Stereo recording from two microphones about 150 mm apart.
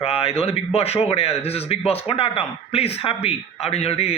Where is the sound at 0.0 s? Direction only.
40° left (ahead or behind).